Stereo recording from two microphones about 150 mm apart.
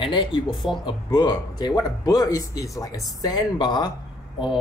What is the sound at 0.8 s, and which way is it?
Speech, 30° left (ahead or behind).